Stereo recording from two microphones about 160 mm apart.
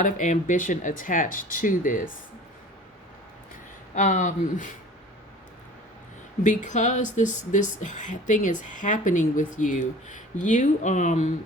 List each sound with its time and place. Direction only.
0.0 s speech: 50° left (ahead or behind)
3.9 s speech: 50° left (ahead or behind)
6.4 s speech: 50° left (ahead or behind)